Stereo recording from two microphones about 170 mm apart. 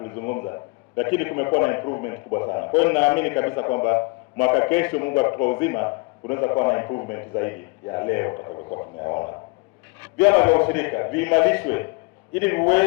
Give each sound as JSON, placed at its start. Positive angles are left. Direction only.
{"t": 0.0, "sound": "a man's voice", "side_deg": 15}
{"t": 8.4, "sound": "a sound", "side_deg": 25}
{"t": 10.0, "sound": "a man's voice", "side_deg": 10}